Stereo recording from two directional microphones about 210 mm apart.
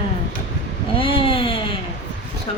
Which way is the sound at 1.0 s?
25° left (ahead or behind).